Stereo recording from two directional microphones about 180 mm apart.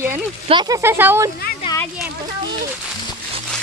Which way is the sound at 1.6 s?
25° left (ahead or behind).